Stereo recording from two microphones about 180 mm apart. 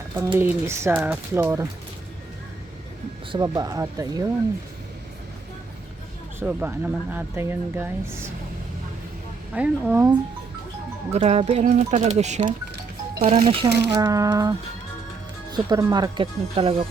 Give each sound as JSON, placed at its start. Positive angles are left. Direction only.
{"t": 0.2, "sound": "speech", "side_deg": -15}
{"t": 3.3, "sound": "speech", "side_deg": -20}
{"t": 6.4, "sound": "speech", "side_deg": -10}
{"t": 9.6, "sound": "speech", "side_deg": -5}
{"t": 11.1, "sound": "speech", "side_deg": -35}
{"t": 13.7, "sound": "speech", "side_deg": -70}
{"t": 13.9, "sound": "speech", "side_deg": -20}
{"t": 15.5, "sound": "speech", "side_deg": -20}